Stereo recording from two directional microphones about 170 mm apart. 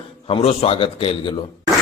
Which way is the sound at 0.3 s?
35° left (ahead or behind).